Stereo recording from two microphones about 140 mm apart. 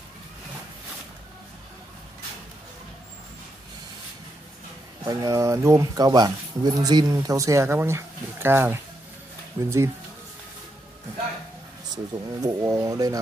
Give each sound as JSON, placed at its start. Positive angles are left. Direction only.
{"t": 5.0, "sound": "speech", "side_deg": -25}
{"t": 11.9, "sound": "speech", "side_deg": -25}